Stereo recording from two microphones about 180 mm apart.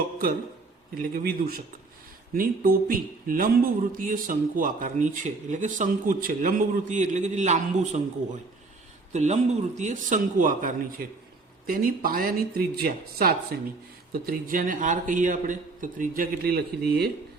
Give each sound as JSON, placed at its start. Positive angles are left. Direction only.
{"t": 0.9, "sound": "speech", "side_deg": -55}